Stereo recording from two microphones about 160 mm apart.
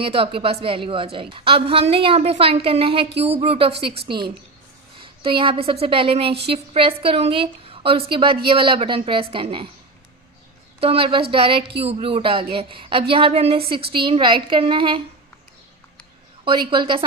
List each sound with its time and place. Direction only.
0.0 s a woman's voice: 35° right (ahead or behind)
4.9 s a sound: 30° right (ahead or behind)
5.8 s a woman's voice: 35° right (ahead or behind)
10.8 s a woman's voice: 35° right (ahead or behind)
16.4 s a woman's voice: 30° right (ahead or behind)